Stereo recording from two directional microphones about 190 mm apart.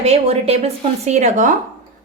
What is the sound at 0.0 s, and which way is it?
Speech, 30° right (ahead or behind).